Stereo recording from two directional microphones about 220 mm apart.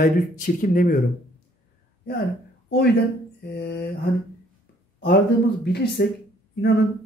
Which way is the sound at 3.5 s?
45° left (ahead or behind).